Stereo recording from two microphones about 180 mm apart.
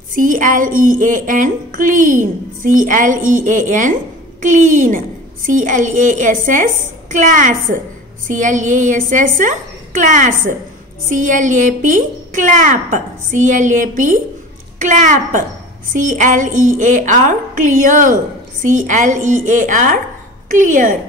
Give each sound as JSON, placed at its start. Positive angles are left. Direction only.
{"t": 0.1, "sound": "a woman's voice", "side_deg": -50}